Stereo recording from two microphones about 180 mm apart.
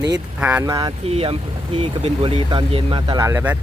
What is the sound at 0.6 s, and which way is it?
Speech, 20° right (ahead or behind).